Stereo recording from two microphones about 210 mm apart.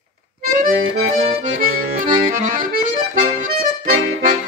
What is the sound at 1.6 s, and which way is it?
Accordion, 40° right (ahead or behind).